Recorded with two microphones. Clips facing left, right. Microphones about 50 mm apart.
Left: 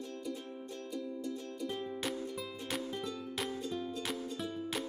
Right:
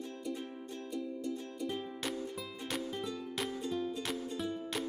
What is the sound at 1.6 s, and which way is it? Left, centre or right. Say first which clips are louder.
Music: left 2 dB; centre.